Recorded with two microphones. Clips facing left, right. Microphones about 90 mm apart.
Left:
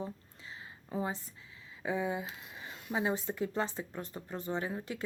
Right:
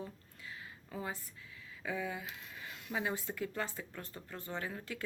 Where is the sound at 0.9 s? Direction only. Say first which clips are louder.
Left 6 dB; 25° left (ahead or behind).